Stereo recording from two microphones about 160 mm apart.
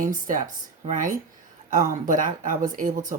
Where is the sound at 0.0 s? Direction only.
55° right (ahead or behind).